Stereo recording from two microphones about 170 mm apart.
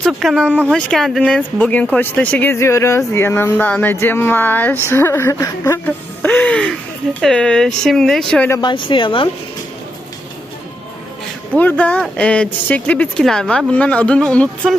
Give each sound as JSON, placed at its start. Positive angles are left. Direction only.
{"t": 0.0, "sound": "speech", "side_deg": 0}
{"t": 8.6, "sound": "a woman's voice", "side_deg": 30}
{"t": 11.5, "sound": "speech", "side_deg": 10}